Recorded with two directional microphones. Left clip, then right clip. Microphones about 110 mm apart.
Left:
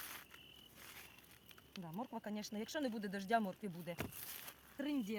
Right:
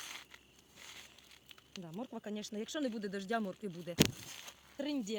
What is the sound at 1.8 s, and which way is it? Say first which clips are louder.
Speech: right 1 dB; 20° left (ahead or behind).